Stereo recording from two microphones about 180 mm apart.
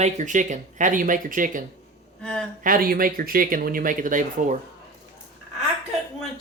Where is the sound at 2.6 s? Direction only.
50° right (ahead or behind).